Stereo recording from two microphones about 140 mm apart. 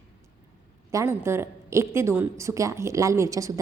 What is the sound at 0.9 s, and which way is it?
A woman's voice, 20° right (ahead or behind).